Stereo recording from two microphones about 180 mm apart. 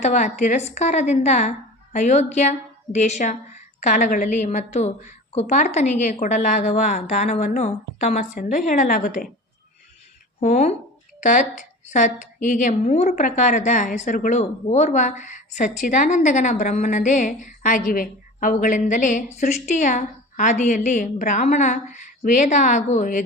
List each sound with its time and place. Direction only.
0.0 s a woman's voice: 40° left (ahead or behind)
10.4 s a woman's voice: 40° left (ahead or behind)